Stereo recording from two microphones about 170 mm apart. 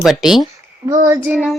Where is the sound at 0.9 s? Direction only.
20° right (ahead or behind).